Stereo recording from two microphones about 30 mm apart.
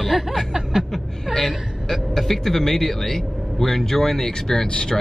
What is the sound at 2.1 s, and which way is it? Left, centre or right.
A man's voice, centre.